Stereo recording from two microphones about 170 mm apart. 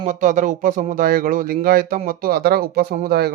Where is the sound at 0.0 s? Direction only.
45° right (ahead or behind).